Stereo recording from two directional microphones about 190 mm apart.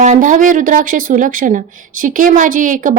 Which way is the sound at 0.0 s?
40° right (ahead or behind).